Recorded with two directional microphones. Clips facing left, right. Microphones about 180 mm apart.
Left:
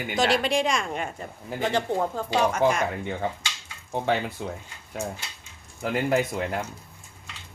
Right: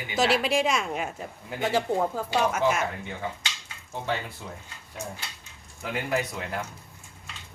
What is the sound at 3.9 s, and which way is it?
Speech, 60° left (ahead or behind).